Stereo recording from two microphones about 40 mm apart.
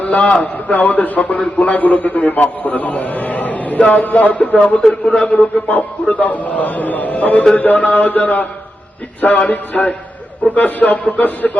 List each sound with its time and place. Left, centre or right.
0.0 s a man's voice: left
9.5 s a man's voice: left